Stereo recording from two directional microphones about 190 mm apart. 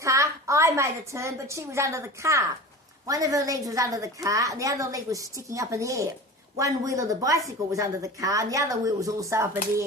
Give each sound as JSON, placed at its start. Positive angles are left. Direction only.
{"t": 0.0, "sound": "a woman's voice", "side_deg": -15}